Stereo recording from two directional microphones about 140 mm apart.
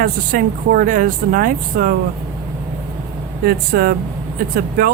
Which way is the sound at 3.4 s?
90° right.